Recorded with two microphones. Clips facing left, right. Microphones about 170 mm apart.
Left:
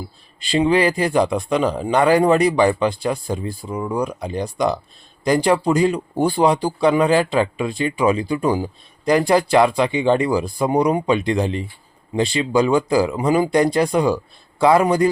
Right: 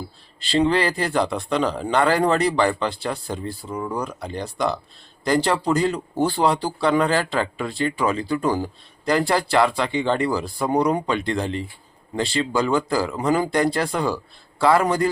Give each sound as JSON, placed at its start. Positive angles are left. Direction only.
{"t": 0.3, "sound": "speech", "side_deg": 15}